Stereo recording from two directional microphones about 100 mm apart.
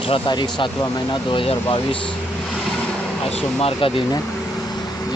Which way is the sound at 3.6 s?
65° left (ahead or behind).